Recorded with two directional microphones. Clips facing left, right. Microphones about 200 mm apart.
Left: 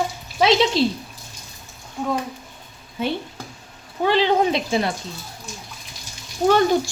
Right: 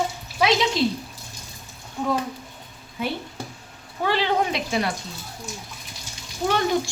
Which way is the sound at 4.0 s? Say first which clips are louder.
Left 5 dB; 20° left (ahead or behind).